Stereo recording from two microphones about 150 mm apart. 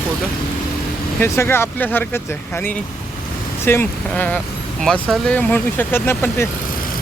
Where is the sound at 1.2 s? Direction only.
15° left (ahead or behind).